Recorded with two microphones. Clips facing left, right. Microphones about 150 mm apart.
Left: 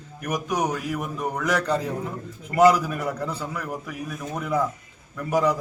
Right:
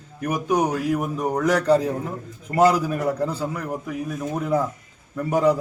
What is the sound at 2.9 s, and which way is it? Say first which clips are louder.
A man's voice: right 5 dB; 35° right (ahead or behind).